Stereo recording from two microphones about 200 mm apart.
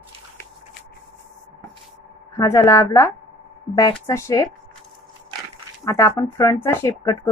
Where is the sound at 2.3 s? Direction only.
15° left (ahead or behind).